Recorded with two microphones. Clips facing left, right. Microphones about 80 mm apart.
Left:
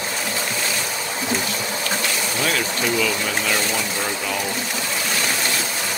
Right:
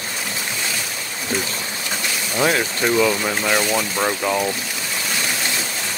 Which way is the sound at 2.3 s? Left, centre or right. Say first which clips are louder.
Right 7 dB; right.